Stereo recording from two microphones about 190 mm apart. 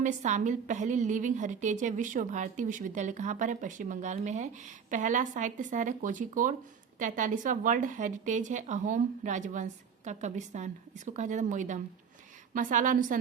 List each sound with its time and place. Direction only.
0.0 s a woman's voice: 40° right (ahead or behind)